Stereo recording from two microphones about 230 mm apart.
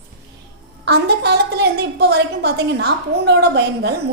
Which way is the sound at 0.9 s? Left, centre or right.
Right.